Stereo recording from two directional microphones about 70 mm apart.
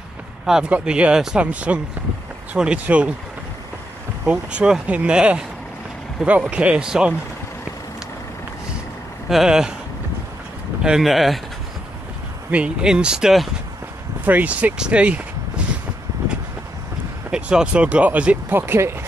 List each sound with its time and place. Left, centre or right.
0.7 s speech: centre
4.3 s speech: centre
6.2 s speech: centre
6.5 s speech: centre
9.3 s speech: centre
10.8 s speech: centre
12.4 s speech: centre
14.2 s speech: right
17.3 s speech: centre
18.5 s speech: right